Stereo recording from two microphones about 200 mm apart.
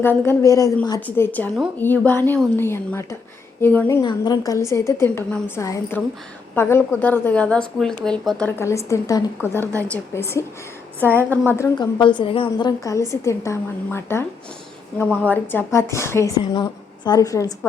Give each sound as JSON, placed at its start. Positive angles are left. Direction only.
{"t": 0.0, "sound": "a woman's voice", "side_deg": 10}
{"t": 4.0, "sound": "a woman's voice", "side_deg": 20}
{"t": 15.3, "sound": "a woman's voice", "side_deg": 10}